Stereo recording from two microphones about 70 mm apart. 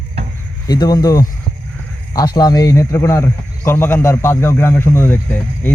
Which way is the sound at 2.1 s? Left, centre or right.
Left.